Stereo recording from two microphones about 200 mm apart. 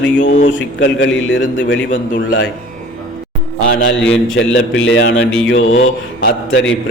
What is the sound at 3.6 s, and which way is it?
A man's voice, 65° left (ahead or behind).